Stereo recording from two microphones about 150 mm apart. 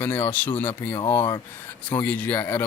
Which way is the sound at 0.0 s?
15° left (ahead or behind).